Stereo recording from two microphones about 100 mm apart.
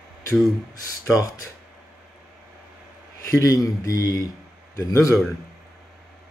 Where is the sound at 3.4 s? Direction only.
35° left (ahead or behind).